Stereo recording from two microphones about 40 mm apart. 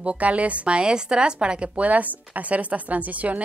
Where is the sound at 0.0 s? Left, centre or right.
Right.